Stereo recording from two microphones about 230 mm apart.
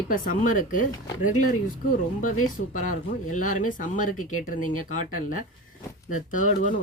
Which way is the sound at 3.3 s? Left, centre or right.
Left.